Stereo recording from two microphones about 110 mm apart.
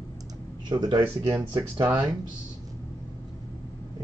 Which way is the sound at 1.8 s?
15° right (ahead or behind).